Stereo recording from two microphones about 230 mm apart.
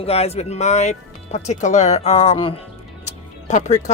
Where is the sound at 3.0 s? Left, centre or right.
Left.